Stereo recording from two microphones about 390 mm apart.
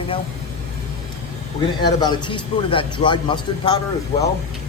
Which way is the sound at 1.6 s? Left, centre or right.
Centre.